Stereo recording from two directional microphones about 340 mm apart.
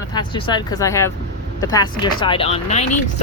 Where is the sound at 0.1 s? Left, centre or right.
Centre.